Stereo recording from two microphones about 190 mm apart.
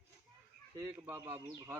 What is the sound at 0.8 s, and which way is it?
A man's voice, 10° right (ahead or behind).